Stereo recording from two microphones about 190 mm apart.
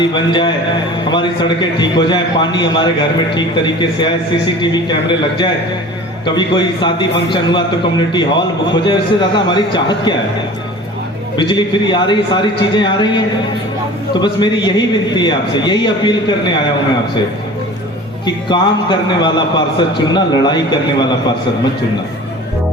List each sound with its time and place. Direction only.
0.0 s a man's voice: 25° left (ahead or behind)
11.3 s a man's voice: 25° left (ahead or behind)
18.3 s a man's voice: 25° left (ahead or behind)